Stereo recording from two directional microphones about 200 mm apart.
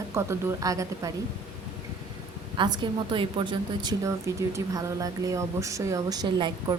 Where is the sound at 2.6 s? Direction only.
20° right (ahead or behind).